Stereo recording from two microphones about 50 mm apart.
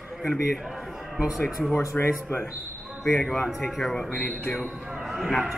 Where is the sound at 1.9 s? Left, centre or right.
Left.